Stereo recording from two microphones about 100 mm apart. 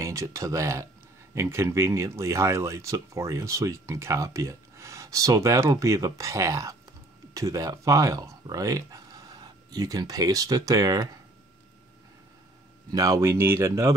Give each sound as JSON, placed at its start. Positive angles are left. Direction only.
{"t": 0.0, "sound": "speech", "side_deg": -30}
{"t": 12.9, "sound": "speech", "side_deg": -35}